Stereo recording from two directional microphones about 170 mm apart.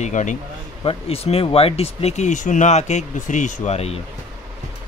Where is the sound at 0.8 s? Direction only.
35° left (ahead or behind).